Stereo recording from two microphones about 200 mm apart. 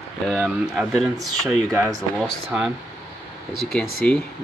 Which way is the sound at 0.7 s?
Centre (ahead or behind).